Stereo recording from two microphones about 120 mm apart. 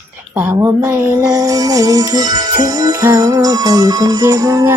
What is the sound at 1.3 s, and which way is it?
Music, 30° right (ahead or behind).